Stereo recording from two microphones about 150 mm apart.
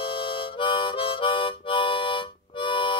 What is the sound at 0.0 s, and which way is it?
Harmonica, 35° left (ahead or behind).